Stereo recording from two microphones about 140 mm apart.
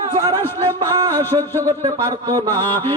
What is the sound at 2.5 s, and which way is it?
Speech, 15° left (ahead or behind).